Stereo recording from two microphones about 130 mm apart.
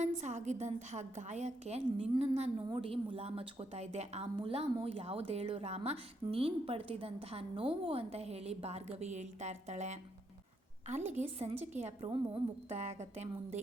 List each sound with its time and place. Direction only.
0.0 s a woman's voice: 65° right (ahead or behind)
11.3 s a woman's voice: 55° right (ahead or behind)
12.0 s a woman's voice: 40° right (ahead or behind)